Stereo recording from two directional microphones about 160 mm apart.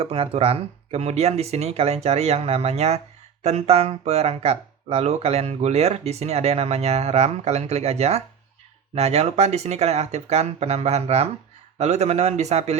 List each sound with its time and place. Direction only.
0.0 s speech: 35° right (ahead or behind)